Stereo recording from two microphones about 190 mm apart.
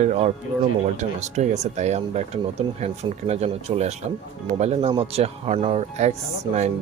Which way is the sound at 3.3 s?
35° right (ahead or behind).